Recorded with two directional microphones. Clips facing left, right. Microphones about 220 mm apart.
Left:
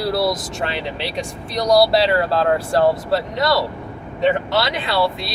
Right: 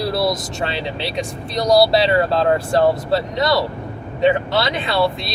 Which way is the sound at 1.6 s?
25° right (ahead or behind).